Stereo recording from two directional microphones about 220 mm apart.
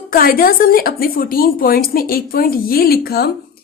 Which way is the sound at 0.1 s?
40° left (ahead or behind).